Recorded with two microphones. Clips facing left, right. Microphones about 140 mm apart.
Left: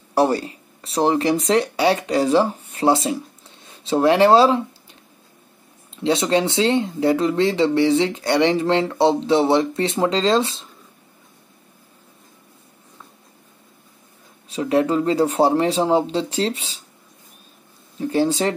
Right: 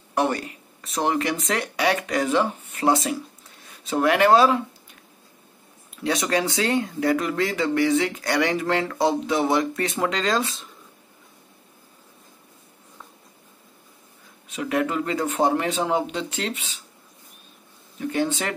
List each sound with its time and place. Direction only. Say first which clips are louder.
0.1 s speech: left 5 dB; 35° left (ahead or behind)
5.9 s speech: left 5 dB; 25° left (ahead or behind)
14.5 s speech: left 6 dB; 30° left (ahead or behind)
17.9 s speech: left 5 dB; 30° left (ahead or behind)